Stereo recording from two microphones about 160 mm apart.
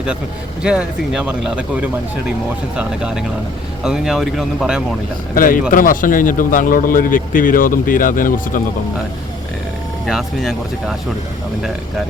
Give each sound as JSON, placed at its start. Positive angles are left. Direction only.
{"t": 0.6, "sound": "speech", "side_deg": -5}
{"t": 5.3, "sound": "a man's voice", "side_deg": 60}
{"t": 10.1, "sound": "speech", "side_deg": 0}